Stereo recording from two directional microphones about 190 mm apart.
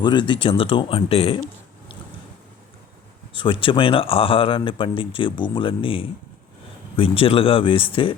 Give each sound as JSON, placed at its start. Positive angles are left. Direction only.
{"t": 0.0, "sound": "speech", "side_deg": 25}
{"t": 3.3, "sound": "speech", "side_deg": 25}